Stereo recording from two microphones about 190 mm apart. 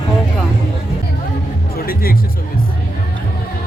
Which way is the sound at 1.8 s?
50° left (ahead or behind).